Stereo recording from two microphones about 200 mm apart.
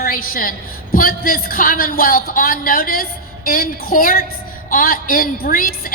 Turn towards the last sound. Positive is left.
turn(degrees=45)  # may be behind; listen again after turning